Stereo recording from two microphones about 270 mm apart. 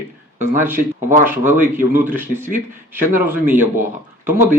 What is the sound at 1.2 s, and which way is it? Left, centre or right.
Speech, centre.